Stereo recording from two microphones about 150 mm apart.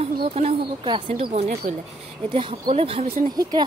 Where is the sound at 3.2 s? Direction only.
25° right (ahead or behind).